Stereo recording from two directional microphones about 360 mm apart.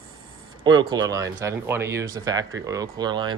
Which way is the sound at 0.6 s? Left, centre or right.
Centre.